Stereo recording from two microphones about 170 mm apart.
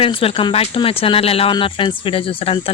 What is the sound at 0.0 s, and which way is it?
Speech, 35° left (ahead or behind).